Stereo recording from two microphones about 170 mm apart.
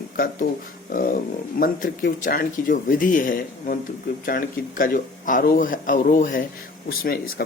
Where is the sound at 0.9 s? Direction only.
55° left (ahead or behind).